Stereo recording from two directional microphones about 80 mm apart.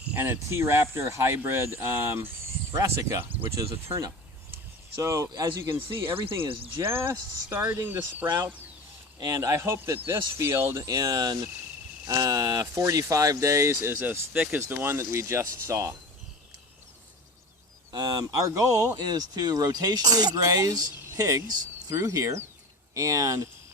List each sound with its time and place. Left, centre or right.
0.2 s speech: right
6.8 s speech: right
9.1 s speech: right
17.9 s speech: right
21.9 s speech: right